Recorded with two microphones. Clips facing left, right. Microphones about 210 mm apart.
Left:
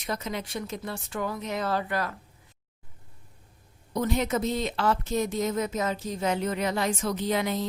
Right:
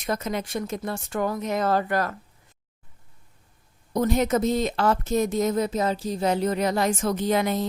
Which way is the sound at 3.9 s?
45° right (ahead or behind).